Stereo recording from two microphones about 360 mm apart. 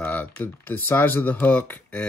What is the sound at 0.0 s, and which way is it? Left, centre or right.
Speech, centre.